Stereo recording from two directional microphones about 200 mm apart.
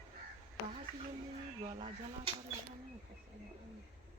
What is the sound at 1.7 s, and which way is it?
Speech, 25° right (ahead or behind).